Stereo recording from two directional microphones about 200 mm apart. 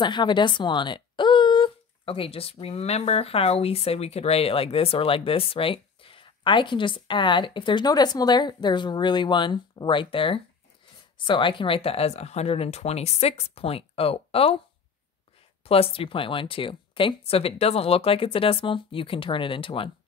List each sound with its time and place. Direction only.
0.0 s speech: 20° left (ahead or behind)
15.6 s speech: 30° left (ahead or behind)